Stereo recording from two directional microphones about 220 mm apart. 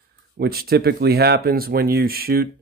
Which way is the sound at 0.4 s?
45° right (ahead or behind).